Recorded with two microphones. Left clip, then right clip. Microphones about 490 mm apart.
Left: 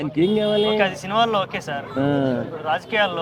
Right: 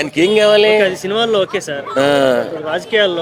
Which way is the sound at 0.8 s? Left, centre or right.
Left.